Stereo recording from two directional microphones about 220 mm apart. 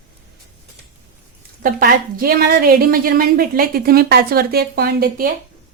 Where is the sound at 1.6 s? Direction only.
40° right (ahead or behind).